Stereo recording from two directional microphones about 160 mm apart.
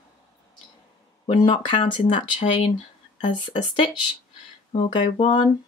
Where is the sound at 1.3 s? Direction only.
30° left (ahead or behind).